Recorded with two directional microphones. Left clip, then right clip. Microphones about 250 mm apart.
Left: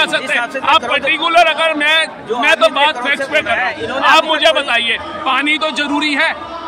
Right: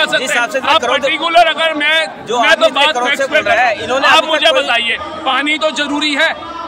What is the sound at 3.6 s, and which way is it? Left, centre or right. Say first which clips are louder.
Speech: right 5 dB; right.